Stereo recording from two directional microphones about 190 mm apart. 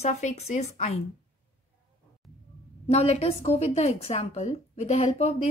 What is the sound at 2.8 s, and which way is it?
A woman's voice, 35° left (ahead or behind).